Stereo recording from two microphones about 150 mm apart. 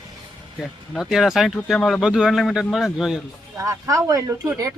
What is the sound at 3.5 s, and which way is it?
Speech, 20° right (ahead or behind).